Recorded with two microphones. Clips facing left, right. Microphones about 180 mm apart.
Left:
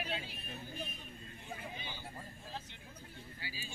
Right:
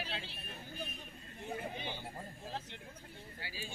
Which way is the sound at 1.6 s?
60° right (ahead or behind).